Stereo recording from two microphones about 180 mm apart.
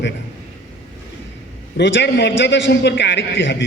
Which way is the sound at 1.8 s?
80° left.